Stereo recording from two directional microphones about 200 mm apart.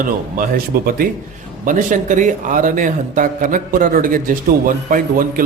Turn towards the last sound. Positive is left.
turn(degrees=-45)  # may be behind; listen again after turning